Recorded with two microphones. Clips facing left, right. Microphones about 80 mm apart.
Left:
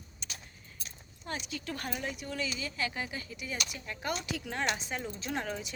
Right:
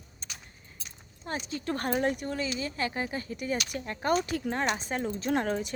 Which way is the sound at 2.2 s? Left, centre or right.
Right.